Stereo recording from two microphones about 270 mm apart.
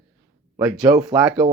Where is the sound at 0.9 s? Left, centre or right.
Centre.